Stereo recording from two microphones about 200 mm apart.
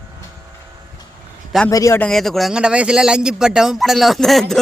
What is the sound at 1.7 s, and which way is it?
Speech, 15° left (ahead or behind).